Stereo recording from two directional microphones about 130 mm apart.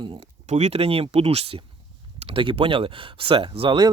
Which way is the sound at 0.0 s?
50° right (ahead or behind).